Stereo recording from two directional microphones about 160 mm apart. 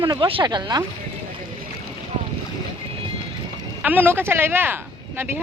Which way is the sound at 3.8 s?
10° right (ahead or behind).